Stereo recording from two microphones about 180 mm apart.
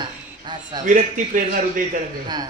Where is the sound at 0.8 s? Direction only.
50° right (ahead or behind).